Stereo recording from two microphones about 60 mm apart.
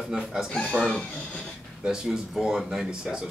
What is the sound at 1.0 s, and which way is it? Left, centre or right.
Speech, centre.